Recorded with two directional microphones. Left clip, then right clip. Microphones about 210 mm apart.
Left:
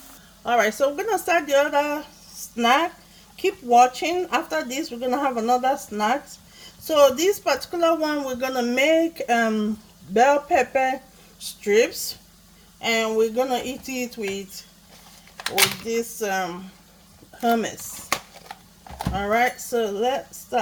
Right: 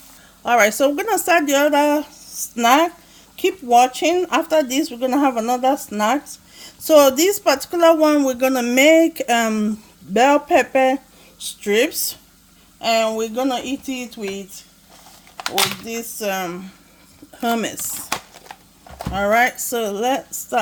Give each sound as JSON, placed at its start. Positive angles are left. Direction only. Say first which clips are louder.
{"t": 0.4, "sound": "speech", "louder": "right 5 dB", "side_deg": -40}
{"t": 15.9, "sound": "speech", "louder": "even", "side_deg": -45}
{"t": 19.1, "sound": "speech", "louder": "right 5 dB", "side_deg": -45}